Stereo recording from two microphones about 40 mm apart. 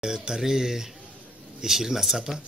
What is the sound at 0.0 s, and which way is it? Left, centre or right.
Speech, centre.